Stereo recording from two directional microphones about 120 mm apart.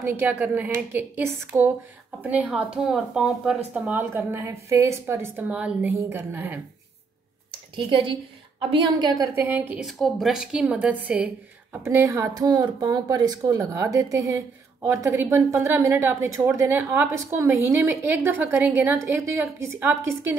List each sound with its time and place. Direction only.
0.0 s speech: 20° right (ahead or behind)
7.7 s a woman's voice: 45° right (ahead or behind)
9.3 s speech: 20° right (ahead or behind)
9.8 s speech: centre (ahead or behind)
11.8 s a woman's voice: 25° right (ahead or behind)